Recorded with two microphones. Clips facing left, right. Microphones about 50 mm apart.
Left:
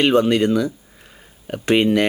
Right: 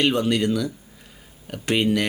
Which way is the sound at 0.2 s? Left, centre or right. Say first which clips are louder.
Left 5 dB; left.